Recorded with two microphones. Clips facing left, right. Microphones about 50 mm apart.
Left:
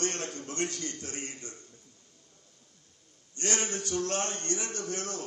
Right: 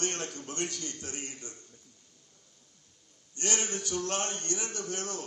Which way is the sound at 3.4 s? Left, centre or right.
Left.